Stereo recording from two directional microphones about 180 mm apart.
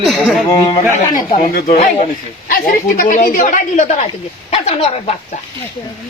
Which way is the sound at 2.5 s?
50° left (ahead or behind).